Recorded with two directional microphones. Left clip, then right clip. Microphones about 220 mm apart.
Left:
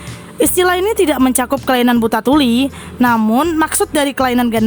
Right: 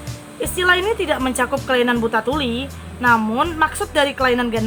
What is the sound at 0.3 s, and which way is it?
Speech, 50° left (ahead or behind).